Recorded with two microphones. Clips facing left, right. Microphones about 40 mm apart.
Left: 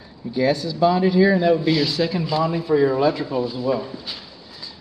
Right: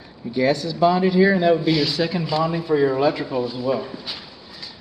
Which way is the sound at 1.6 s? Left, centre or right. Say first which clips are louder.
Even; centre.